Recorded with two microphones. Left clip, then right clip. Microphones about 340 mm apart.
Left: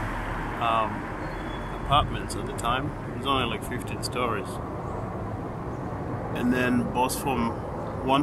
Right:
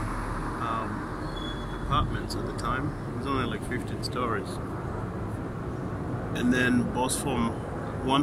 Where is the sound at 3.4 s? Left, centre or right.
Centre.